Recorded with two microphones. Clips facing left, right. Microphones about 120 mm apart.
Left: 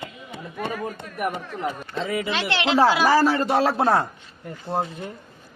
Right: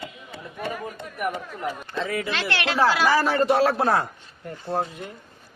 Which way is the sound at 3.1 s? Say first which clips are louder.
Left 1 dB; 30° left (ahead or behind).